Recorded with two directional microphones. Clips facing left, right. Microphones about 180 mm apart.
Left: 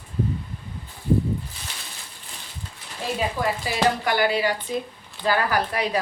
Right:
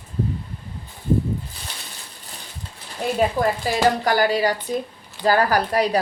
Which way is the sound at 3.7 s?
45° right (ahead or behind).